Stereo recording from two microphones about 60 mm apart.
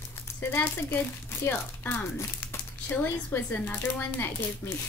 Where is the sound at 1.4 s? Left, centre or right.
Left.